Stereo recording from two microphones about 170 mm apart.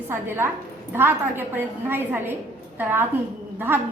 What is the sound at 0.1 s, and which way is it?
A woman's voice, 15° right (ahead or behind).